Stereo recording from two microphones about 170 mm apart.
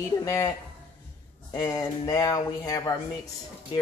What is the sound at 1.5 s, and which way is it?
Speech, 25° left (ahead or behind).